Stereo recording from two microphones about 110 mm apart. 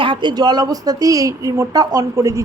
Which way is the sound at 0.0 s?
45° right (ahead or behind).